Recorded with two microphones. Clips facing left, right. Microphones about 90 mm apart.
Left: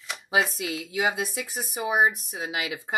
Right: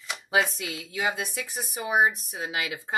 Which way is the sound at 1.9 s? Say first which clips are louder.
Even; 15° left (ahead or behind).